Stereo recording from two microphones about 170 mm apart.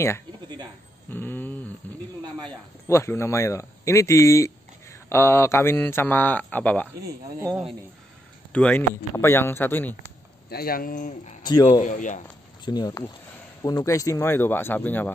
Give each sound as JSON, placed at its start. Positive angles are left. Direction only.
{"t": 1.1, "sound": "a sound", "side_deg": 10}
{"t": 1.8, "sound": "snake", "side_deg": 10}
{"t": 2.4, "sound": "speech", "side_deg": 15}
{"t": 8.5, "sound": "speech", "side_deg": 10}
{"t": 10.5, "sound": "speech", "side_deg": 60}
{"t": 11.4, "sound": "speech", "side_deg": 25}
{"t": 11.8, "sound": "a man's voice", "side_deg": 50}
{"t": 12.6, "sound": "speech", "side_deg": 25}